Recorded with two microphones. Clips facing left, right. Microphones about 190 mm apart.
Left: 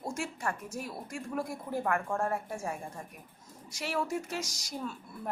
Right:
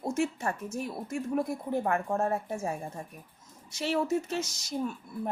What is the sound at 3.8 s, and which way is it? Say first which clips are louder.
A woman's voice: right 5 dB; 25° right (ahead or behind).